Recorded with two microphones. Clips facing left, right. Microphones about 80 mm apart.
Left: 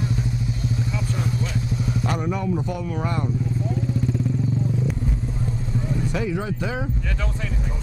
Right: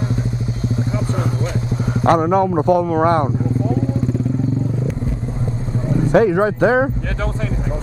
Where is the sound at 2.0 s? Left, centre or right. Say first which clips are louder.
Right 14 dB; right.